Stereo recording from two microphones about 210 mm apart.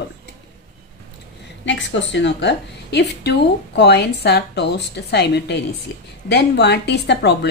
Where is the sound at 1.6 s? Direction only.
60° left (ahead or behind).